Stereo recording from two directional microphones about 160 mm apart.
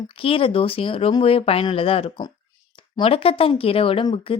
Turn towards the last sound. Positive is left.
turn(degrees=35)  # may be behind; listen again after turning